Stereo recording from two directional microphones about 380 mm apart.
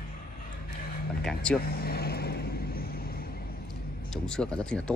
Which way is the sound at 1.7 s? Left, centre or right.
Left.